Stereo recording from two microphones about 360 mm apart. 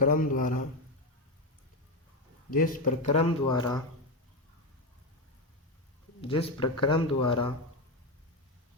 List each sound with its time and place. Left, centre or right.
0.0 s a man's voice: left
2.5 s speech: left
6.2 s speech: centre